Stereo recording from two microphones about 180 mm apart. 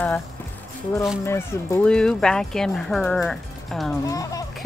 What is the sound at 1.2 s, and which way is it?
Speech, 15° left (ahead or behind).